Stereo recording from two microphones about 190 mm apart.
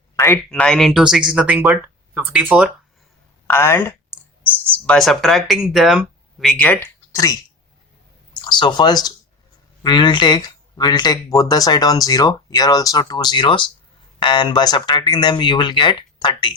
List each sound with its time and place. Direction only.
0.2 s speech: 10° left (ahead or behind); by 2.6 s 5° right (ahead or behind)
3.4 s clicking: 10° left (ahead or behind)
4.9 s speech: centre (ahead or behind); by 7.3 s 15° left (ahead or behind)
8.4 s speech: 25° left (ahead or behind)